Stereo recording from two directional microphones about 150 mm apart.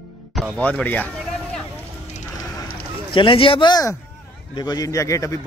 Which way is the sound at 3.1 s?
35° left (ahead or behind).